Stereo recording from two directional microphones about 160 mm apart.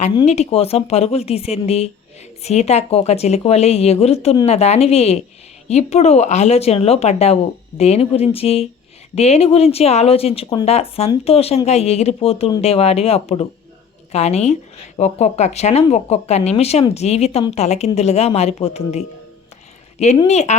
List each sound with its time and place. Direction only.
0.3 s a woman's voice: 40° left (ahead or behind)
20.2 s speech: 45° left (ahead or behind)